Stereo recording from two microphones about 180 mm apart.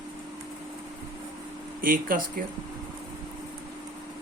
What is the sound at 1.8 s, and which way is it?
Speech, 50° right (ahead or behind).